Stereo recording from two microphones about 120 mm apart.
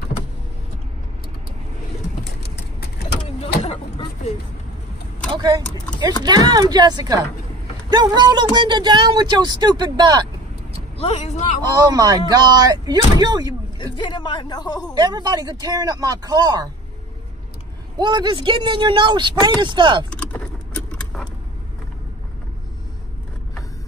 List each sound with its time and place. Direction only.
3.3 s vehicle: 60° left (ahead or behind)
5.3 s speech: 35° right (ahead or behind)
11.0 s speech: 65° left (ahead or behind); by 11.6 s 85° left
11.6 s speech: 35° right (ahead or behind)
13.9 s a woman's voice: 40° left (ahead or behind)
15.0 s speech: 35° right (ahead or behind)
17.9 s speech: 35° right (ahead or behind)
20.1 s keys jangling: 10° left (ahead or behind)